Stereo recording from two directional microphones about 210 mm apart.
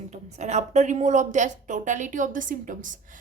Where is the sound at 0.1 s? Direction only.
35° right (ahead or behind).